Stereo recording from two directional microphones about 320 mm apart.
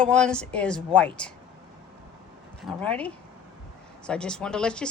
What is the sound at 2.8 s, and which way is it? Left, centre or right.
Speech, centre.